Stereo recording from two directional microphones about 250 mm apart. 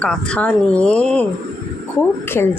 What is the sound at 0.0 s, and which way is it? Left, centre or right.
Speech, centre.